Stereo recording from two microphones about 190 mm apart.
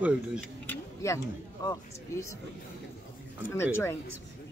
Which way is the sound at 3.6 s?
15° left (ahead or behind).